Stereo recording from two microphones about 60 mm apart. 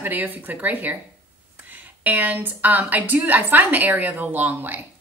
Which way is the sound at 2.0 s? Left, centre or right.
Right.